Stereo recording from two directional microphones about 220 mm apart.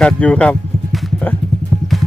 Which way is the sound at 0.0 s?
5° left (ahead or behind).